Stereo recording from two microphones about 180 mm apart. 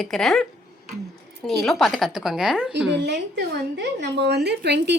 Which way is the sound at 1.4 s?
5° left (ahead or behind).